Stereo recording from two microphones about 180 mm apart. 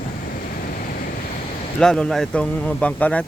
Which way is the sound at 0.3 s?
55° left (ahead or behind).